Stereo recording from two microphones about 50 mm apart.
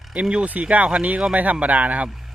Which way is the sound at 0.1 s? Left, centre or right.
Right.